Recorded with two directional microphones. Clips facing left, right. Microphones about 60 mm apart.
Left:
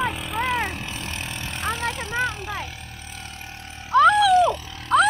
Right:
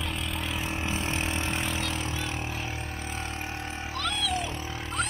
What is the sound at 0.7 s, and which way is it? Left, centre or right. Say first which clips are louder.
Vehicle: right 2 dB; right.